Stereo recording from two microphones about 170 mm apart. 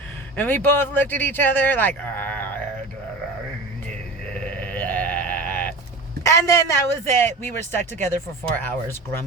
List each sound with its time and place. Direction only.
0.3 s speech: 10° left (ahead or behind)
4.4 s sheep: 10° left (ahead or behind)
6.2 s a man's voice: 15° left (ahead or behind)